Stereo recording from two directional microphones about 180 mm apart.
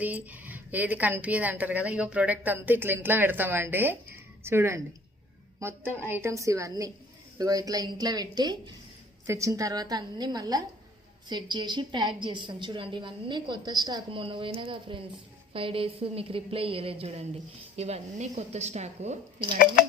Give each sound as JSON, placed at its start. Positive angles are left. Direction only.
{"t": 0.0, "sound": "a woman's voice", "side_deg": -10}